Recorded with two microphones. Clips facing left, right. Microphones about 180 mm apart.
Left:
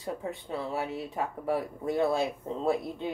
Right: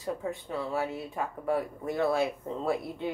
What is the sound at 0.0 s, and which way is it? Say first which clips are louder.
Speech: right 2 dB; 25° left (ahead or behind).